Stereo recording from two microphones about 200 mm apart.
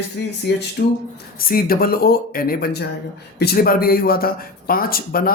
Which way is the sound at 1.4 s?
45° left (ahead or behind).